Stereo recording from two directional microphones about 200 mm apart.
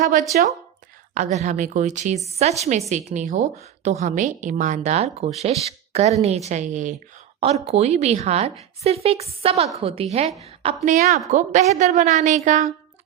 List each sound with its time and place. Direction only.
0.3 s a woman's voice: 45° right (ahead or behind)